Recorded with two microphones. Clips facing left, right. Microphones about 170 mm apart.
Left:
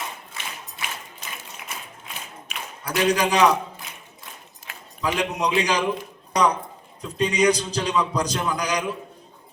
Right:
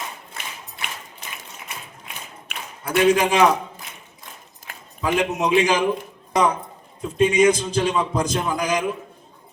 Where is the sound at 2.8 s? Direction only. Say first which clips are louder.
Right 4 dB; 25° right (ahead or behind).